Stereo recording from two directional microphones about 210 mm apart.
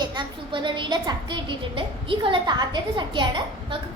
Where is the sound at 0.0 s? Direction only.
20° right (ahead or behind).